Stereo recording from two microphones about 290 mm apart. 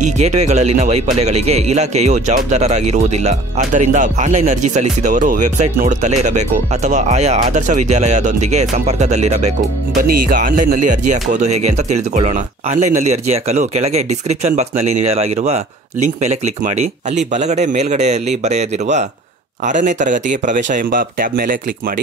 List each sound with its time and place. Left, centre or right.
0.0 s speech: right